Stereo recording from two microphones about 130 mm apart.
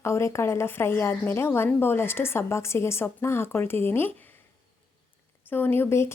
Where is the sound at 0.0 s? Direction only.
20° left (ahead or behind).